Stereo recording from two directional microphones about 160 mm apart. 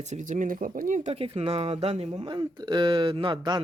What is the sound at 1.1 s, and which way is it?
Speech, 35° right (ahead or behind).